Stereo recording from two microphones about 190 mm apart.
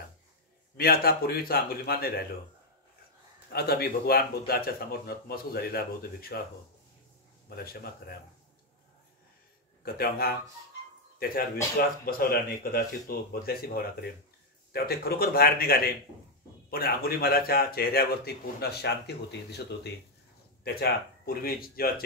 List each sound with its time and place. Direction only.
0.7 s speech: 55° left (ahead or behind)
3.5 s speech: 55° left (ahead or behind)
7.4 s speech: 55° left (ahead or behind)
9.8 s speech: 55° left (ahead or behind)